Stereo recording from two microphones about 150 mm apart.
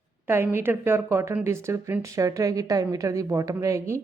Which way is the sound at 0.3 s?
15° right (ahead or behind).